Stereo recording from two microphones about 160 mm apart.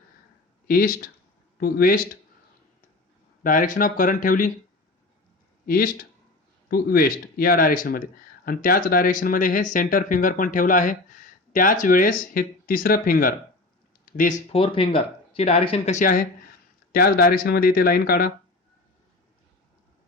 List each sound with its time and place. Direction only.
0.7 s speech: 65° left (ahead or behind)
3.4 s speech: 60° left (ahead or behind)
5.6 s speech: 65° left (ahead or behind)
14.0 s speech: 55° left (ahead or behind)
16.9 s speech: 70° left (ahead or behind)